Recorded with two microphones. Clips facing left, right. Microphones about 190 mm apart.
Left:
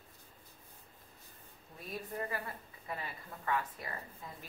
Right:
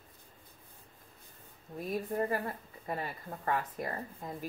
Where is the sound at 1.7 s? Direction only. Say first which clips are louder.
Right 8 dB; 45° right (ahead or behind).